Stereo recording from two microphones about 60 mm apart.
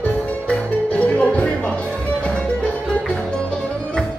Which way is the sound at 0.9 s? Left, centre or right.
Left.